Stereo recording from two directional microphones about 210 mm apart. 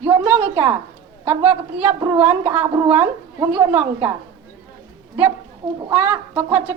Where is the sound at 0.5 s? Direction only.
25° right (ahead or behind).